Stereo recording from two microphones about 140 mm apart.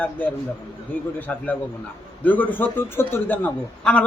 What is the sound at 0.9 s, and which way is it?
A man's voice, 10° left (ahead or behind).